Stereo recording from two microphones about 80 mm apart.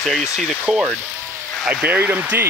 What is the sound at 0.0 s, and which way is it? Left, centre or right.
Speech, centre.